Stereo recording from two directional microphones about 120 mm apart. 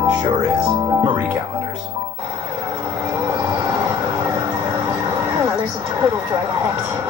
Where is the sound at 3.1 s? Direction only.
25° right (ahead or behind).